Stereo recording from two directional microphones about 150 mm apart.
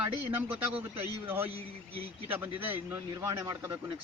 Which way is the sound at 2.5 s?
15° right (ahead or behind).